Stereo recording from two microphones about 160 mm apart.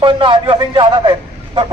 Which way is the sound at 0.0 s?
30° right (ahead or behind).